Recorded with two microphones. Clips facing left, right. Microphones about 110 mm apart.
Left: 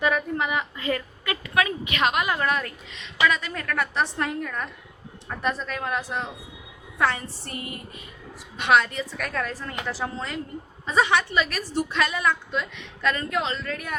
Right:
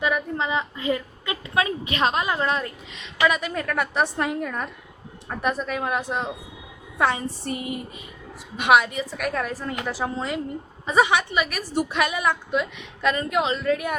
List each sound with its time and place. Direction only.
0.0 s a woman's voice: 20° right (ahead or behind)